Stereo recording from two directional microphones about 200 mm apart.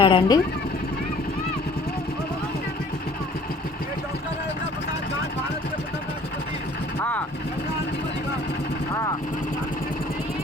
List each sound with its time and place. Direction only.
0.0 s speech: 25° left (ahead or behind)